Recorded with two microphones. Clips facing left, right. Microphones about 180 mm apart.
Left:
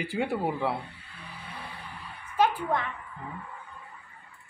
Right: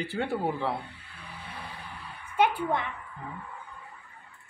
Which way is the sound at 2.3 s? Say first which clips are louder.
Even; 25° right (ahead or behind).